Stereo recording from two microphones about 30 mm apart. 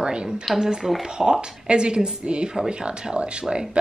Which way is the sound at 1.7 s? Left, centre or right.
Right.